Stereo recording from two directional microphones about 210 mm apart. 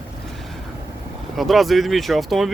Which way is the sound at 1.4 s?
Centre (ahead or behind).